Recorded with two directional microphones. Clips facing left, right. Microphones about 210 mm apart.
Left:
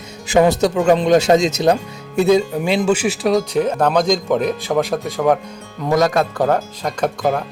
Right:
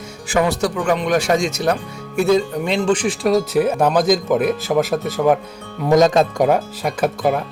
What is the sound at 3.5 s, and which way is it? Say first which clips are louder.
Speech: even; 10° right (ahead or behind).